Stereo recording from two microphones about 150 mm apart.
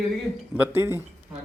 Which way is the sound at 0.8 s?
15° right (ahead or behind).